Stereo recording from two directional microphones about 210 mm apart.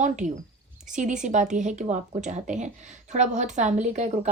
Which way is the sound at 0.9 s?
35° right (ahead or behind).